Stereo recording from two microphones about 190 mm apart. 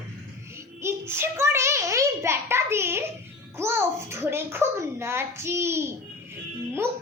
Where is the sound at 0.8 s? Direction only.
15° right (ahead or behind).